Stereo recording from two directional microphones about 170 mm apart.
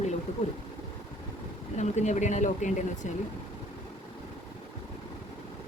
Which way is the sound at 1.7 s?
45° left (ahead or behind).